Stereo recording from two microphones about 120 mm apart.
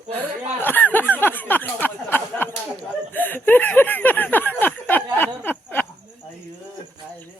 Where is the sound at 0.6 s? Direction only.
15° left (ahead or behind).